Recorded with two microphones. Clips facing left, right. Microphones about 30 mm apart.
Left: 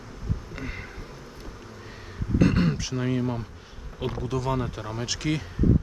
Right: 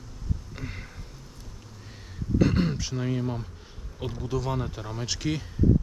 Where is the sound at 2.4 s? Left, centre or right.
Centre.